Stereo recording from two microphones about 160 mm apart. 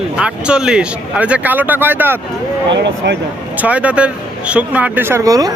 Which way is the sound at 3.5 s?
10° right (ahead or behind).